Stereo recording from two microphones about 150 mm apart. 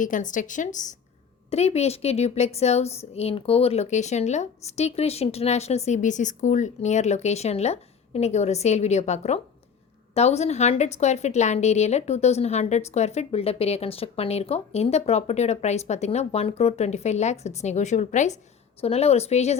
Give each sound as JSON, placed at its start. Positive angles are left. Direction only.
{"t": 0.0, "sound": "a woman's voice", "side_deg": 60}
{"t": 1.5, "sound": "a woman's voice", "side_deg": 45}